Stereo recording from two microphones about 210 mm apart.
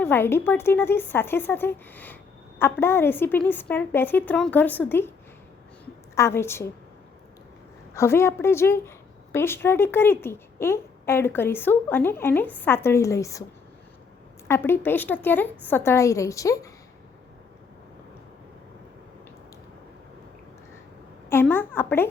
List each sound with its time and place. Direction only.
0.0 s a woman's voice: 10° left (ahead or behind)
6.1 s a woman's voice: 10° left (ahead or behind)
7.9 s a woman's voice: 10° left (ahead or behind)
14.4 s a woman's voice: 10° left (ahead or behind)
21.2 s a woman's voice: 10° left (ahead or behind)